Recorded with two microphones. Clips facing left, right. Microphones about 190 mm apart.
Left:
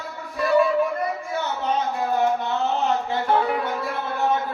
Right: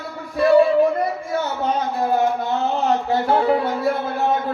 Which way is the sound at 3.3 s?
30° right (ahead or behind).